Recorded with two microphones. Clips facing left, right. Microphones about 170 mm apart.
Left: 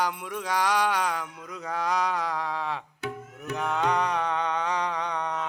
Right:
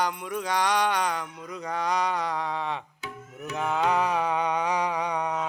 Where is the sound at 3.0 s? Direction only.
65° left (ahead or behind).